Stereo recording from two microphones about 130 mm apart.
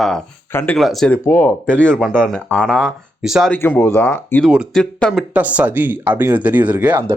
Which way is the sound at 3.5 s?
15° left (ahead or behind).